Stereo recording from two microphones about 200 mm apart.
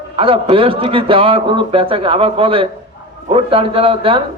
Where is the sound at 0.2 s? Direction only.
25° right (ahead or behind).